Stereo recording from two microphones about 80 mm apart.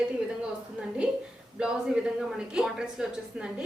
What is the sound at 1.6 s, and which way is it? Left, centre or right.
A woman's voice, centre.